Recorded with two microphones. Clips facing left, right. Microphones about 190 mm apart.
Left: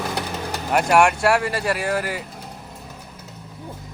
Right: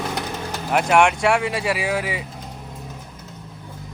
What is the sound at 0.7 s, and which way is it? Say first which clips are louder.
Speech: even; centre (ahead or behind).